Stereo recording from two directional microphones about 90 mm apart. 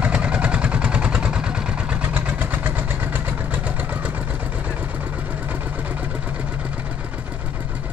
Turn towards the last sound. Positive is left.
turn(degrees=-20)  # may be behind; listen again after turning